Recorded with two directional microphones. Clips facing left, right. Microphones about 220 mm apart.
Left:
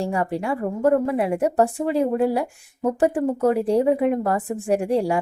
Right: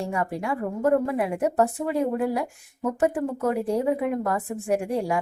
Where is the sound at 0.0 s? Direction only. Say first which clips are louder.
Left 4 dB; 30° left (ahead or behind).